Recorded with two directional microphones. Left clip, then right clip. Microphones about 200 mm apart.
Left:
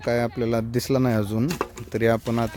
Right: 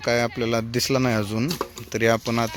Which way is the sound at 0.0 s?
15° left (ahead or behind).